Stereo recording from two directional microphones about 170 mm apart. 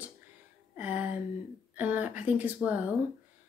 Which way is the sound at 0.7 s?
10° right (ahead or behind).